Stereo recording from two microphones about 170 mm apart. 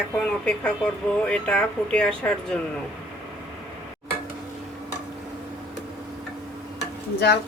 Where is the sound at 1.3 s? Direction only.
5° left (ahead or behind).